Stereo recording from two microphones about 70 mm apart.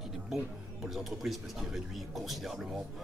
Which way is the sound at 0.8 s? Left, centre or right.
Centre.